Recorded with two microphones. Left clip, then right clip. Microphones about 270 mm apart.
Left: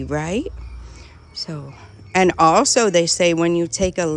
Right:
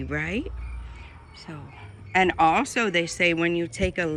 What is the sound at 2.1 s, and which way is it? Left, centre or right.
Speech, left.